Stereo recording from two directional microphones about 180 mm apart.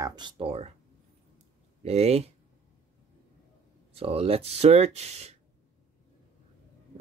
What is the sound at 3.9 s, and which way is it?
Speech, 35° right (ahead or behind).